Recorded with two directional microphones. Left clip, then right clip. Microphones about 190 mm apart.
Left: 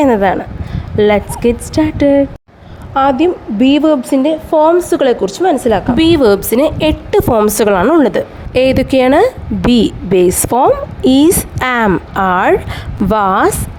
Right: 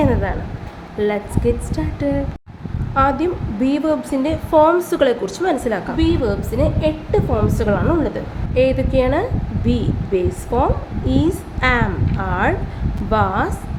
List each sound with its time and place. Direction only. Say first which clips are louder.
0.0 s a woman's voice: left 9 dB; 50° left (ahead or behind); by 5.5 s 35° left (ahead or behind)
6.0 s a woman's voice: left 10 dB; 60° left (ahead or behind)